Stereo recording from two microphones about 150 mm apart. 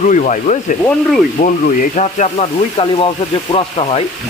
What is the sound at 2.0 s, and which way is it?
Speech, 50° left (ahead or behind).